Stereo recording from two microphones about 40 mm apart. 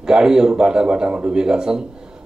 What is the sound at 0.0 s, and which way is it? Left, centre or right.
A man's voice, centre.